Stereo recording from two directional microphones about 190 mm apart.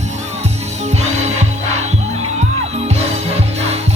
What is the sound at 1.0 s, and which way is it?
Music, 35° right (ahead or behind).